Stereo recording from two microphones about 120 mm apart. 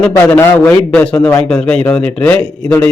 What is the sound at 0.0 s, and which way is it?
A man's voice, 15° left (ahead or behind).